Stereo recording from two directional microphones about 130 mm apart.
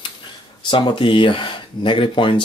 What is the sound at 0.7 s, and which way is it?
Speech, 40° left (ahead or behind).